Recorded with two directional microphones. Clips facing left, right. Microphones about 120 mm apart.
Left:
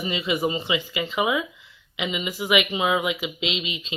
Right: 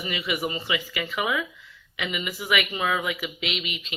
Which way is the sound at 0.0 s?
25° left (ahead or behind).